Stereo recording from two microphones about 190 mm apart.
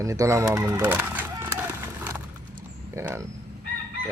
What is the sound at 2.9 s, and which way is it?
Speech, 15° right (ahead or behind).